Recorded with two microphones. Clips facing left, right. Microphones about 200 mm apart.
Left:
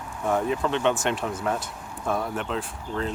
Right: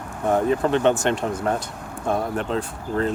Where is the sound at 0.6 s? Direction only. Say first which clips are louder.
Right 5 dB; 40° right (ahead or behind).